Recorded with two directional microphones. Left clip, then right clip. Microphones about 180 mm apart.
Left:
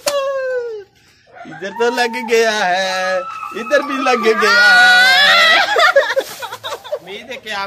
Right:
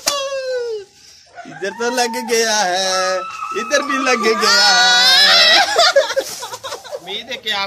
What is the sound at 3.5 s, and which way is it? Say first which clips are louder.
Speech: left 1 dB; 60° left (ahead or behind).